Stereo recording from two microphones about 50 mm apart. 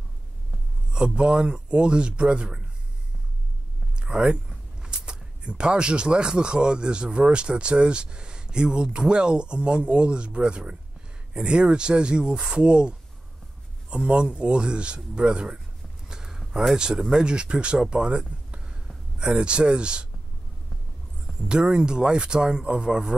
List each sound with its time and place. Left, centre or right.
0.9 s a man's voice: centre
4.0 s a man's voice: centre
16.1 s a sound: centre
17.2 s a man's voice: centre
18.5 s a sound: centre
19.1 s a man's voice: centre
21.3 s speech: centre